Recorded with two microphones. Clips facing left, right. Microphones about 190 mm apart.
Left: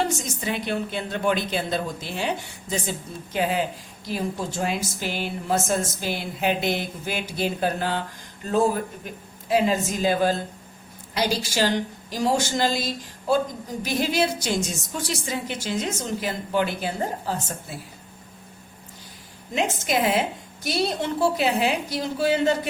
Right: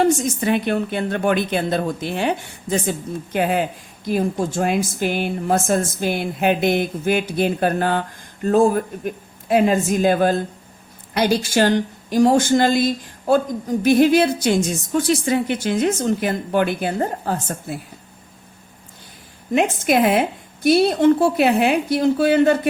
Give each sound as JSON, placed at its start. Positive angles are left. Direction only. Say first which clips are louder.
{"t": 0.0, "sound": "a woman's voice", "louder": "right 9 dB", "side_deg": -55}
{"t": 19.5, "sound": "a woman's voice", "louder": "right 7 dB", "side_deg": -55}